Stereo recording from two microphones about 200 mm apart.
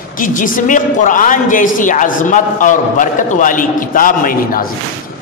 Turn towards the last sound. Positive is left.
turn(degrees=45)  # may be behind; listen again after turning